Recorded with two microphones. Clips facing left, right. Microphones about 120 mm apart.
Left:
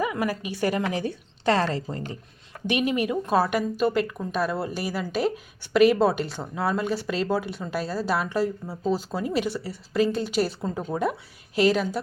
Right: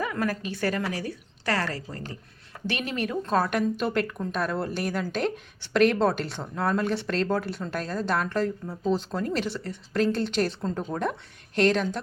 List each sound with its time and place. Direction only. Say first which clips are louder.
0.0 s a woman's voice: left 2 dB; 15° left (ahead or behind)